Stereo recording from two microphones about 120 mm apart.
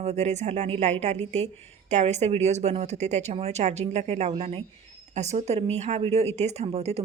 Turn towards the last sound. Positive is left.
turn(degrees=-60)  # may be behind; listen again after turning